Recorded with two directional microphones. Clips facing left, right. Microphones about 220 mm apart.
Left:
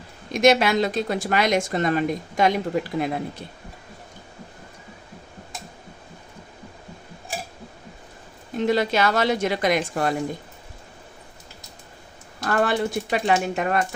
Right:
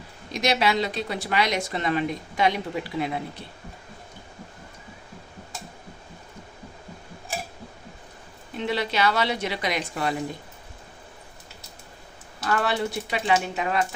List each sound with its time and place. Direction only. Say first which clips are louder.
0.3 s a woman's voice: left 6 dB; 50° left (ahead or behind)
8.5 s a woman's voice: left 5 dB; 45° left (ahead or behind)
12.5 s a woman's voice: left 3 dB; 45° left (ahead or behind)